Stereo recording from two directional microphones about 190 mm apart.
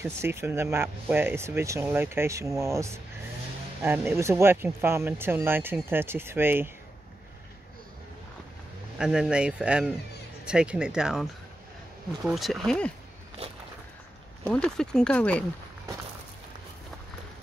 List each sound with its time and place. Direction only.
0.0 s speech: 15° right (ahead or behind)
8.9 s speech: 5° right (ahead or behind)
12.3 s speech: centre (ahead or behind)
13.4 s a sound: 30° right (ahead or behind)
14.5 s speech: 5° left (ahead or behind)